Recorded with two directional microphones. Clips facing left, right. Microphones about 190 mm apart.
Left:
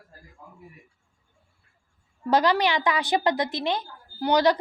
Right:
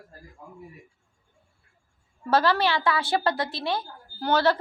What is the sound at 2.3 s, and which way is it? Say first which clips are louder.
A woman's voice: left 1 dB; 15° left (ahead or behind).